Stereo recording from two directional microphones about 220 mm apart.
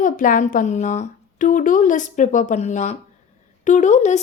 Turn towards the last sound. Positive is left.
turn(degrees=30)  # may be behind; listen again after turning